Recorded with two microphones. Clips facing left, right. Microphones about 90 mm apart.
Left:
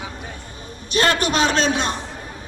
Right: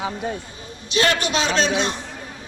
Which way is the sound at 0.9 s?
40° left (ahead or behind).